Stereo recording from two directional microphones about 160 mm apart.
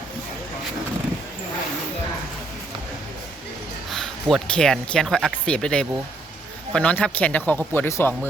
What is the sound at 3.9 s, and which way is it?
Speech, 5° left (ahead or behind).